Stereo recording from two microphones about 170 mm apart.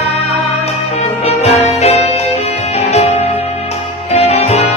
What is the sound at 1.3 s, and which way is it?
Music, 35° left (ahead or behind).